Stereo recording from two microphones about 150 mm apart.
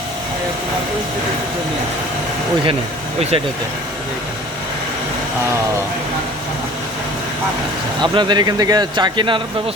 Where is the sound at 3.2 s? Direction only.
45° right (ahead or behind).